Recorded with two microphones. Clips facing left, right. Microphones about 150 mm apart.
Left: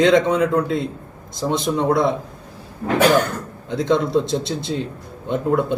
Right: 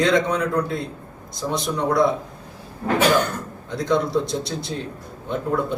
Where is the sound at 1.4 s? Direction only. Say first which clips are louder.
Left 4 dB; 30° left (ahead or behind).